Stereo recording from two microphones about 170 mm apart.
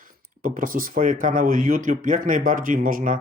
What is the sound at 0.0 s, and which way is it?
Speech, 55° right (ahead or behind).